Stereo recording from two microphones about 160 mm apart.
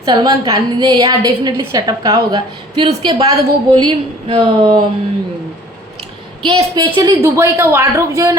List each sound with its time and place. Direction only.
0.0 s a woman's voice: 25° right (ahead or behind)
6.4 s a woman's voice: 30° right (ahead or behind)